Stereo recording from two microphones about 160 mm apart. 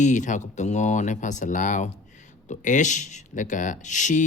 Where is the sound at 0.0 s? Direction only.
50° left (ahead or behind).